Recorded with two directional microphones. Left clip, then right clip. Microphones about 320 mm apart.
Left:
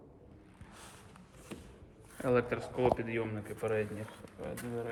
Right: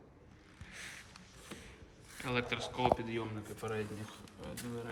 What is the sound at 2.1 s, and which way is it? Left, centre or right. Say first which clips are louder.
A man's voice: left 6 dB; centre.